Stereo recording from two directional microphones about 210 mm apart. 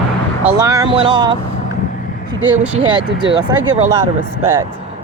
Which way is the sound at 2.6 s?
25° right (ahead or behind).